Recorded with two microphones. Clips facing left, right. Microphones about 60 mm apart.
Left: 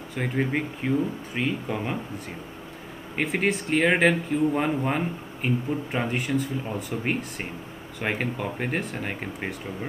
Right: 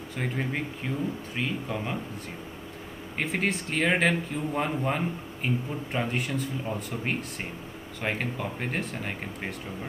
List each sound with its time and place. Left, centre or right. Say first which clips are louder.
0.4 s speech: left 5 dB; centre
3.2 s speech: left 4 dB; centre